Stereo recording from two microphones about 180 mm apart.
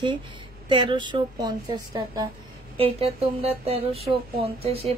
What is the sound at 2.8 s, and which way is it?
Speech, 30° right (ahead or behind).